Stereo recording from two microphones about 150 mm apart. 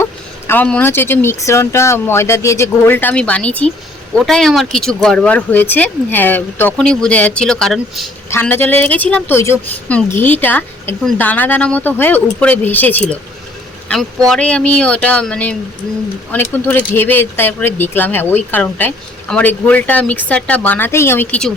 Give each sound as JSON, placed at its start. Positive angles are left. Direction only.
{"t": 0.0, "sound": "speech", "side_deg": 15}
{"t": 8.3, "sound": "speech", "side_deg": 15}
{"t": 14.3, "sound": "speech", "side_deg": 5}